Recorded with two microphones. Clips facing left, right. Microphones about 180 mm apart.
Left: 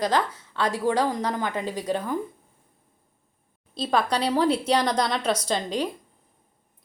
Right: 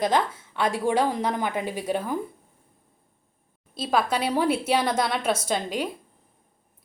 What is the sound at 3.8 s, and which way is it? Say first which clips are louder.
A woman's voice: even; 5° right (ahead or behind).